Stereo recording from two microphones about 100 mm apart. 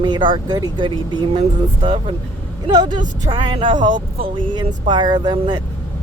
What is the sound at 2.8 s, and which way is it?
Speech, 45° right (ahead or behind).